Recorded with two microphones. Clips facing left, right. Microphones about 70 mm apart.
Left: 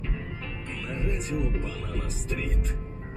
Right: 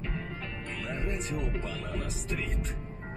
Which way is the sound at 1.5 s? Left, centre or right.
Right.